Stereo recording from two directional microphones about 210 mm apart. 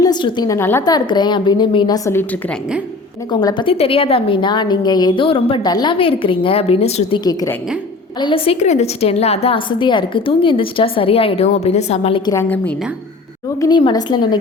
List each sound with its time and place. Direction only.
0.0 s a woman's voice: 20° left (ahead or behind)
3.3 s a woman's voice: 20° left (ahead or behind)
8.2 s a woman's voice: 25° left (ahead or behind)
12.3 s a woman's voice: 10° left (ahead or behind)
13.6 s a woman's voice: 20° left (ahead or behind)